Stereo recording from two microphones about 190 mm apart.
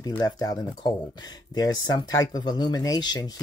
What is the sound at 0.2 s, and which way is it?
Speech, 20° left (ahead or behind).